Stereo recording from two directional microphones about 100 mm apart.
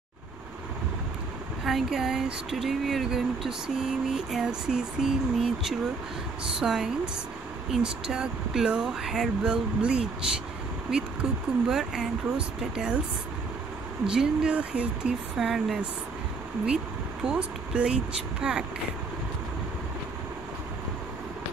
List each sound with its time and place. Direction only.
1.6 s a sound: centre (ahead or behind)
7.7 s speech: 10° right (ahead or behind)
11.6 s speech: 5° right (ahead or behind)
14.0 s speech: 5° right (ahead or behind)
15.3 s a sound: 5° right (ahead or behind)
16.6 s speech: 5° right (ahead or behind)